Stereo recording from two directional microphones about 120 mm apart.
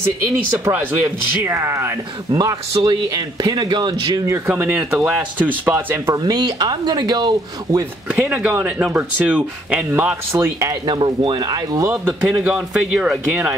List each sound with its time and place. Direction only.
0.0 s speech: 20° right (ahead or behind)
2.3 s speech: 35° right (ahead or behind)
4.5 s speech: 10° right (ahead or behind)
6.1 s speech: 35° right (ahead or behind)
8.1 s speech: 10° right (ahead or behind)
10.3 s speech: 25° right (ahead or behind)
10.9 s speech: 40° right (ahead or behind)
11.9 s speech: 15° right (ahead or behind)
12.3 s speech: 5° right (ahead or behind)